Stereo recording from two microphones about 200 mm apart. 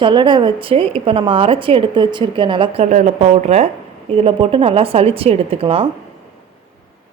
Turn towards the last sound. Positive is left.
turn(degrees=-30)  # may be behind; listen again after turning